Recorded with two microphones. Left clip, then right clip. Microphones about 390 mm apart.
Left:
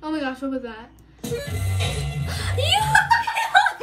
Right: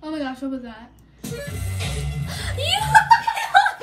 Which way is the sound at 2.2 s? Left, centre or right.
Centre.